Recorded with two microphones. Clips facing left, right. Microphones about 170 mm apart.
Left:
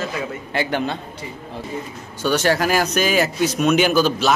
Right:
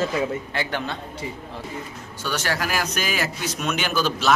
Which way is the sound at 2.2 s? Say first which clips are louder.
Left 8 dB; 25° left (ahead or behind).